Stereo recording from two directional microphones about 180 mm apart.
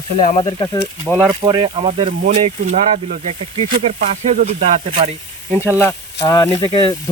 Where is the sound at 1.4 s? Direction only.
25° right (ahead or behind).